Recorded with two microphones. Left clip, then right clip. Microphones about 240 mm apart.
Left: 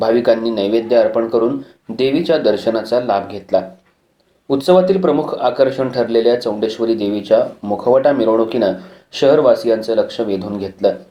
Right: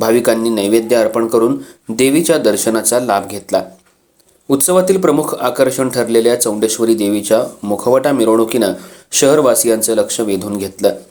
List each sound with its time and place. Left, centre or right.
0.0 s speech: right